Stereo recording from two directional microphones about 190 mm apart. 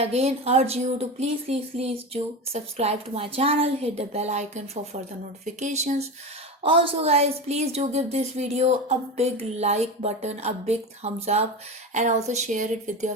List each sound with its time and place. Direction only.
0.0 s a woman's voice: 35° right (ahead or behind)
6.6 s a woman's voice: 30° right (ahead or behind)